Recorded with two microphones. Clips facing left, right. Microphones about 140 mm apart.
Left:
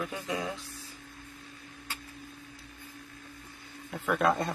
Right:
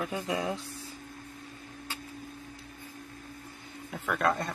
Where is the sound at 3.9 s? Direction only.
Centre (ahead or behind).